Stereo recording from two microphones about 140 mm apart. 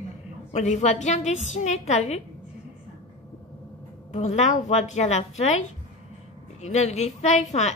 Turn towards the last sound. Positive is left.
turn(degrees=55)  # may be behind; listen again after turning